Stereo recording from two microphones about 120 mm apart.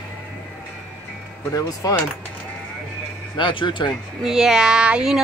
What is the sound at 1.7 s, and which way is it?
Speech, 30° left (ahead or behind).